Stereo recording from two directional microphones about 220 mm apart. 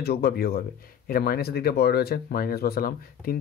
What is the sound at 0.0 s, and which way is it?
Speech, 45° left (ahead or behind).